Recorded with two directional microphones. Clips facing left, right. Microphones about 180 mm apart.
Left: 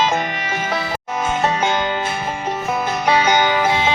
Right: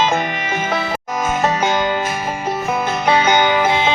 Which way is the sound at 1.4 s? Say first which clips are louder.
Right 3 dB; 40° right (ahead or behind).